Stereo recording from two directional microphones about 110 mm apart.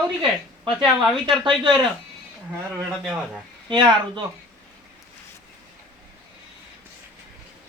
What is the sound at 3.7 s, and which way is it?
Speech, 45° right (ahead or behind).